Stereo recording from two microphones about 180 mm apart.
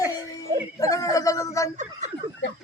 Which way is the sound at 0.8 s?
20° left (ahead or behind).